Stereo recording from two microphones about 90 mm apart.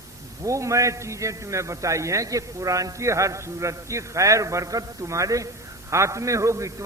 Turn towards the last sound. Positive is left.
turn(degrees=-35)  # may be behind; listen again after turning